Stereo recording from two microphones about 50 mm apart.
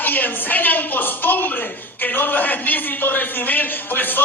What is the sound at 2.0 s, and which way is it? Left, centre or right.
A man's voice, left.